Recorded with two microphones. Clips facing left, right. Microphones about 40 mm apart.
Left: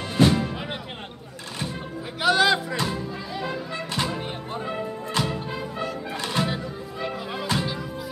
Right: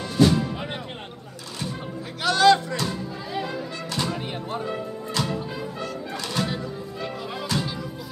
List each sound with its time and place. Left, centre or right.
0.2 s music: centre
2.2 s music: centre
4.2 s music: centre
4.6 s music: centre